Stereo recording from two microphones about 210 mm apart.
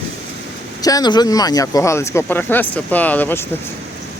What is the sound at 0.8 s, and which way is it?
Speech, 15° left (ahead or behind).